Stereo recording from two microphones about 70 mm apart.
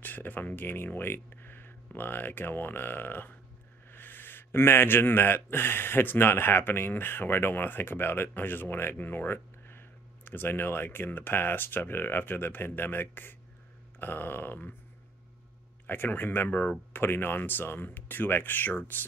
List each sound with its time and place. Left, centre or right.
0.0 s speech: left
15.9 s speech: left
16.4 s speech: centre
16.9 s speech: left